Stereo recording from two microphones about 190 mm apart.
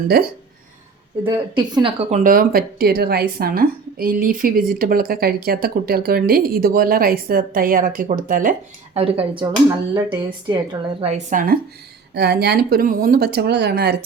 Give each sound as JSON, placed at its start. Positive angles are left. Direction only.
{"t": 1.2, "sound": "speech", "side_deg": -25}
{"t": 2.0, "sound": "speech", "side_deg": -40}
{"t": 9.0, "sound": "speech", "side_deg": -30}
{"t": 11.1, "sound": "speech", "side_deg": -45}
{"t": 12.1, "sound": "speech", "side_deg": -60}